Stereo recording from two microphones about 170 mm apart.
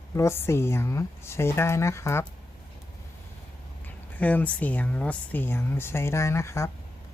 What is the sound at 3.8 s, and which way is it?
Speech, 10° left (ahead or behind).